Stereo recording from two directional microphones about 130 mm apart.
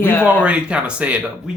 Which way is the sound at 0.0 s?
15° left (ahead or behind).